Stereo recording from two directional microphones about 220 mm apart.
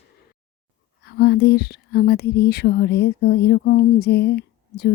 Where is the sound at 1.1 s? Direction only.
45° left (ahead or behind).